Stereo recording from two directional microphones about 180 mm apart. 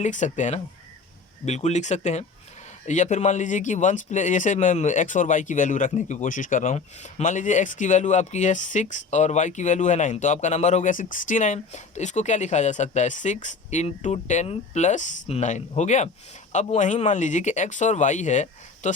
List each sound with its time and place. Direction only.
0.0 s speech: 40° left (ahead or behind)